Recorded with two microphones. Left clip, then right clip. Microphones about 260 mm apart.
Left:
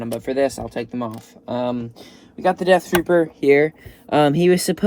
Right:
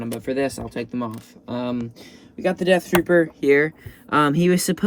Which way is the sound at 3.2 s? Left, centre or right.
Left.